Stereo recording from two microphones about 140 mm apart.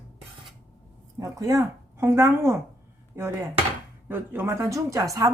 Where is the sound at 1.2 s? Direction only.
25° right (ahead or behind).